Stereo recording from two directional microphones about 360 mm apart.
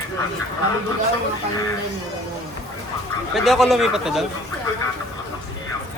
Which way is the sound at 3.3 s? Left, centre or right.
Centre.